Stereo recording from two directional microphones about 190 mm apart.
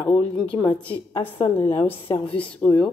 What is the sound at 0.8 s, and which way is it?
Speech, 30° left (ahead or behind).